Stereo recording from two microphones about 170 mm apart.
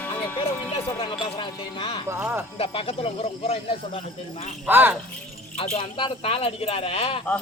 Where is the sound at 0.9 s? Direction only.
30° left (ahead or behind).